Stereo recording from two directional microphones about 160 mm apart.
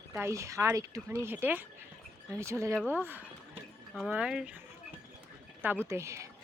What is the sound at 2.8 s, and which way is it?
Speech, 5° left (ahead or behind).